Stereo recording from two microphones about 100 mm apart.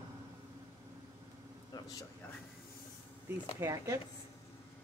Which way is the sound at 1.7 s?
40° left (ahead or behind).